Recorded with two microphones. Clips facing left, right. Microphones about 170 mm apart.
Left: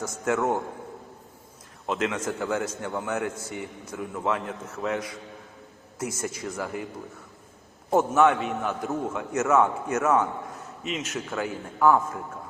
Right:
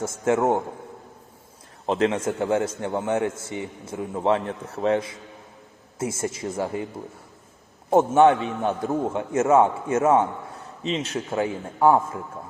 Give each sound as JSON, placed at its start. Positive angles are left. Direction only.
{"t": 0.0, "sound": "a man's voice", "side_deg": -25}
{"t": 1.9, "sound": "a man's voice", "side_deg": -30}
{"t": 7.9, "sound": "a man's voice", "side_deg": -25}